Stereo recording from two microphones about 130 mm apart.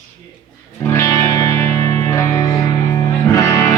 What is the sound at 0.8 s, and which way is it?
Music, 20° left (ahead or behind).